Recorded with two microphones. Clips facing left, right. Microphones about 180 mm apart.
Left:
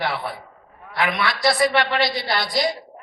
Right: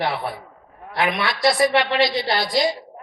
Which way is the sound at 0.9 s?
25° right (ahead or behind).